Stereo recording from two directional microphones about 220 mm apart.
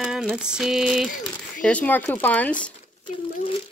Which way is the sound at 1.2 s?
5° left (ahead or behind).